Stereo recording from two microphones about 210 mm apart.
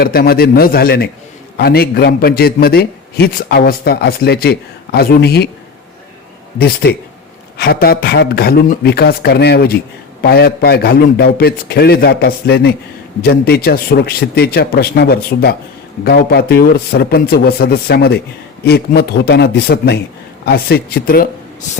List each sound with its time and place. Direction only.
0.0 s a man's voice: 45° left (ahead or behind)
6.6 s a man's voice: 50° left (ahead or behind)